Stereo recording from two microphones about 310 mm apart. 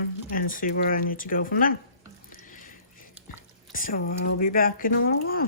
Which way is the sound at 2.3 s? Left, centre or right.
Left.